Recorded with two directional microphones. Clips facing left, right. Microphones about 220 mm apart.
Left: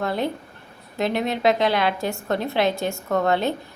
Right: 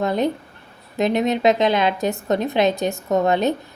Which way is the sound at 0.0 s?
20° right (ahead or behind).